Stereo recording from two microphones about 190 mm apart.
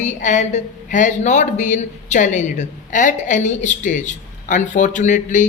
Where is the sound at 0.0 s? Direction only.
40° left (ahead or behind).